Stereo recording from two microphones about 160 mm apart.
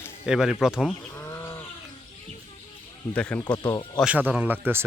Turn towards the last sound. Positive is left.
turn(degrees=-15)  # may be behind; listen again after turning